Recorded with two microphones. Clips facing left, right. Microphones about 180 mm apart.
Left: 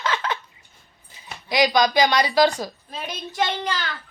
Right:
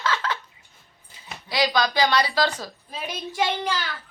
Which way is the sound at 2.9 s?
10° right (ahead or behind).